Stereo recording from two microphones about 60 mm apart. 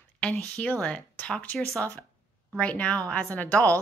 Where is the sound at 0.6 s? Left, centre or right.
Centre.